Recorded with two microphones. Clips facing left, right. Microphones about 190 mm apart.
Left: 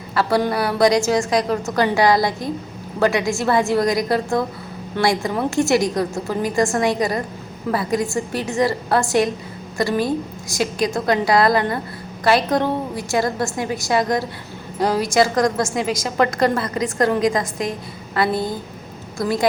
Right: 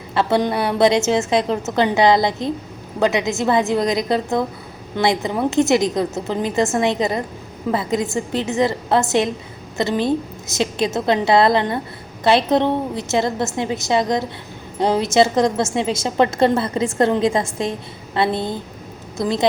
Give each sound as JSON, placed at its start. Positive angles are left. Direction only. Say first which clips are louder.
{"t": 0.1, "sound": "a woman's voice", "louder": "right 1 dB", "side_deg": -25}